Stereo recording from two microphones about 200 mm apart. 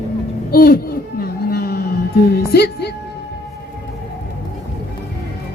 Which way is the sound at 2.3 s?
50° left (ahead or behind).